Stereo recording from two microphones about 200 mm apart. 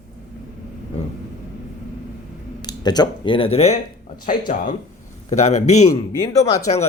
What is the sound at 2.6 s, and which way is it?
Speech, 20° left (ahead or behind).